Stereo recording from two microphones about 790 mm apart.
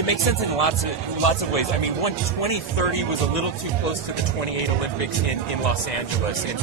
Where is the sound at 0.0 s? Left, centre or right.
Left.